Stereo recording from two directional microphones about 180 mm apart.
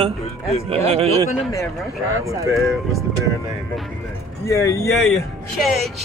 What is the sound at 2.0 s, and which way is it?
Music, 15° right (ahead or behind).